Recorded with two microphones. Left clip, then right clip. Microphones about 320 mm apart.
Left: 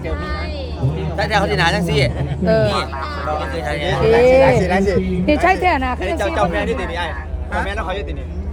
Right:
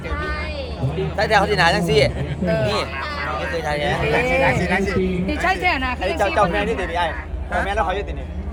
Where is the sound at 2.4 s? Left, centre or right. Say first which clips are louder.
Left 6 dB; left.